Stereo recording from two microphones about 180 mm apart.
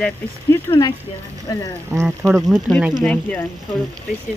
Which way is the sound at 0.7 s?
20° left (ahead or behind).